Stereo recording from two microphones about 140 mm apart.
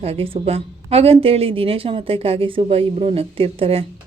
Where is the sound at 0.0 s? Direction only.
45° right (ahead or behind).